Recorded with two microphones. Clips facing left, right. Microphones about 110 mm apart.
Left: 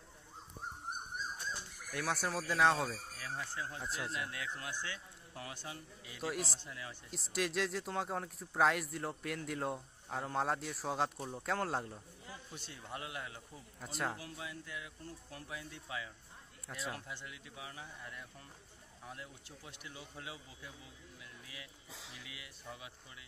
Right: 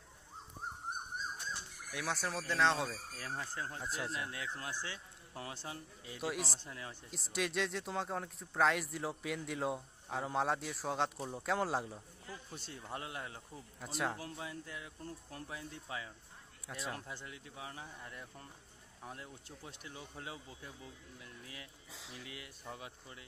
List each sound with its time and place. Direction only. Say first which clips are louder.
1.9 s speech: left 2 dB; centre (ahead or behind)
3.2 s speech: right 2 dB; 40° right (ahead or behind)
3.8 s speech: right 1 dB; centre (ahead or behind)
4.1 s speech: even; 30° right (ahead or behind)
6.2 s speech: even; centre (ahead or behind)
6.6 s speech: right 1 dB; 35° right (ahead or behind)
7.1 s speech: left 1 dB; centre (ahead or behind)
12.5 s speech: right 1 dB; 40° right (ahead or behind)
13.7 s speech: right 1 dB; centre (ahead or behind)
14.2 s speech: right 2 dB; 35° right (ahead or behind)
21.2 s a sound: right 1 dB; 40° right (ahead or behind)
22.1 s speech: right 4 dB; 40° right (ahead or behind)